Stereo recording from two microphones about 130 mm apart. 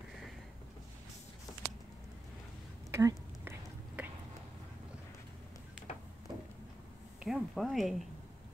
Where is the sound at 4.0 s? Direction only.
10° right (ahead or behind).